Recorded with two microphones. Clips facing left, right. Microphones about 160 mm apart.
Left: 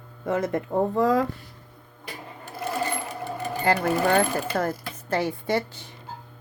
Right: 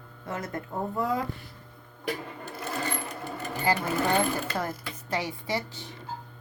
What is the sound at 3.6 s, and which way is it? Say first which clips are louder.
Speech: left 4 dB; 60° left (ahead or behind).